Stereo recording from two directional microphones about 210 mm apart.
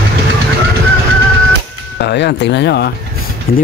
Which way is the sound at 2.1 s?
55° left (ahead or behind).